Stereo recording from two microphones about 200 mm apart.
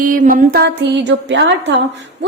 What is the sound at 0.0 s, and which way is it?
A woman's voice, 40° right (ahead or behind).